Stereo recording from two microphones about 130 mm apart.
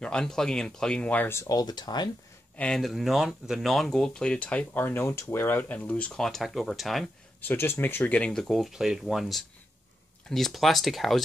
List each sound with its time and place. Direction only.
0.0 s speech: 5° left (ahead or behind)
1.5 s speech: 30° left (ahead or behind)
2.5 s speech: 5° left (ahead or behind)
7.4 s speech: 15° left (ahead or behind); by 11.2 s centre (ahead or behind)